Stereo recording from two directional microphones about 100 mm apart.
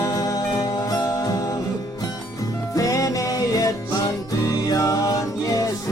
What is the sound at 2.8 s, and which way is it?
Music, 35° left (ahead or behind).